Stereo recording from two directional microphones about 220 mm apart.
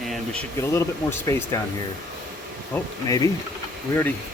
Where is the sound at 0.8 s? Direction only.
10° left (ahead or behind).